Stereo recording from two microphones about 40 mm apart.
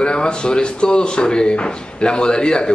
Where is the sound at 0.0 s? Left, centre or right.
Left.